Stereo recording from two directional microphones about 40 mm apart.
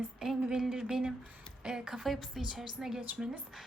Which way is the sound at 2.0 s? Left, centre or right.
Centre.